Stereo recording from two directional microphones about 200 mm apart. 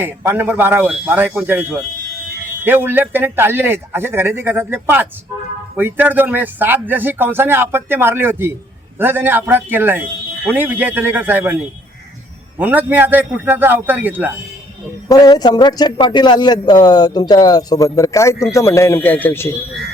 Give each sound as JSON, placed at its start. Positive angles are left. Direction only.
{"t": 0.0, "sound": "speech", "side_deg": -10}
{"t": 12.5, "sound": "speech", "side_deg": -10}
{"t": 15.1, "sound": "speech", "side_deg": 20}